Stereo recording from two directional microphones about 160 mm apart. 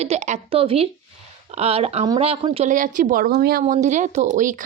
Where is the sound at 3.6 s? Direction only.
50° right (ahead or behind).